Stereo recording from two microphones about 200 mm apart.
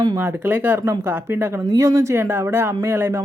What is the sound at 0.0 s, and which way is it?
Speech, 15° right (ahead or behind).